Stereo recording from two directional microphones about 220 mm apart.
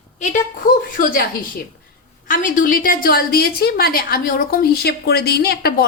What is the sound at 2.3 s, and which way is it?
A woman's voice, 35° left (ahead or behind).